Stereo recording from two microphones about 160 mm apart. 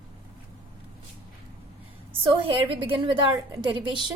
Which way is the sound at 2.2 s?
30° right (ahead or behind).